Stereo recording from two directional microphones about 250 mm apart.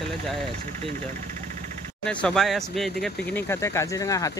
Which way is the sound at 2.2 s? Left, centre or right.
Centre.